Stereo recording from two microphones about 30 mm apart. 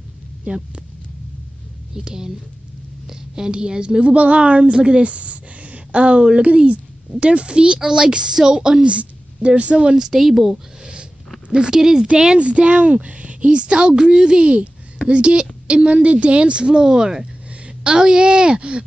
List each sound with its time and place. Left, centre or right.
0.5 s speech: right
2.0 s a woman's voice: right
4.0 s speech: right
8.8 s a woman's voice: right
9.8 s speech: right
10.0 s speech: centre
11.5 s speech: right
12.4 s speech: right
13.5 s speech: right
15.6 s a sound: right
15.9 s speech: right